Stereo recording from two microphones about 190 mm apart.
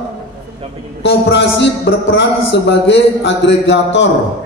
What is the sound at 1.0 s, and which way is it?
A man's voice, 70° left (ahead or behind).